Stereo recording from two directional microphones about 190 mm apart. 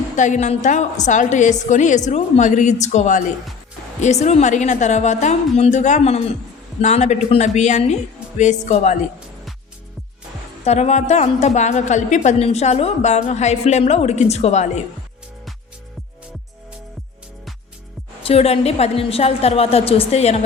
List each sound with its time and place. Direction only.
0.2 s a woman's voice: 40° left (ahead or behind)
10.6 s a woman's voice: 35° left (ahead or behind)
18.2 s a woman's voice: 30° left (ahead or behind)